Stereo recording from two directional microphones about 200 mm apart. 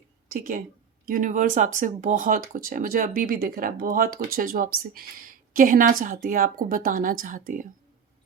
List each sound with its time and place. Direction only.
0.3 s speech: 45° right (ahead or behind)